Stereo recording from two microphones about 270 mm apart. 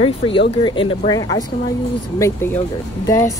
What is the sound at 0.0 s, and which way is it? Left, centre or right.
Speech, centre.